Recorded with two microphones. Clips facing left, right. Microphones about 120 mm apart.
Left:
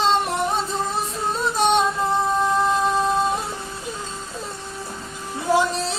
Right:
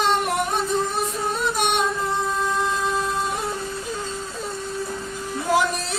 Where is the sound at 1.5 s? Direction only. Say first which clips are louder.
Left 8 dB; 30° left (ahead or behind).